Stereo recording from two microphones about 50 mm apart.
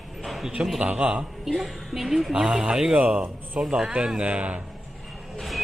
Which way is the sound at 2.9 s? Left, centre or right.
Right.